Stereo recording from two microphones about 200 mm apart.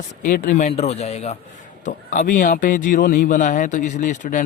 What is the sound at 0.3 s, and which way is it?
A man's voice, 45° left (ahead or behind).